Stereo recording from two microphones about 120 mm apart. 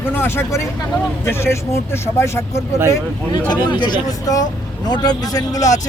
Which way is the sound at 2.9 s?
35° left (ahead or behind).